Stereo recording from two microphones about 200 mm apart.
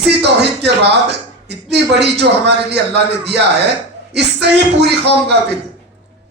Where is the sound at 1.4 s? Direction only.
55° right (ahead or behind).